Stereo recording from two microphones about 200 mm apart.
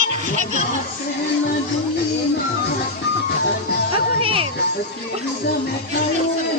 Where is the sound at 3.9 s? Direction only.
25° right (ahead or behind).